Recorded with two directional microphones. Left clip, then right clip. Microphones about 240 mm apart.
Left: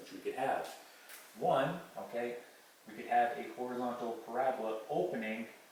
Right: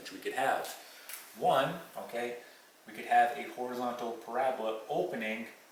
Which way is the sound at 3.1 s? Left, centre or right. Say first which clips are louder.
Right 5 dB; centre.